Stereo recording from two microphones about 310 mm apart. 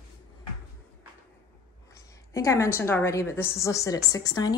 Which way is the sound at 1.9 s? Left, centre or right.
Centre.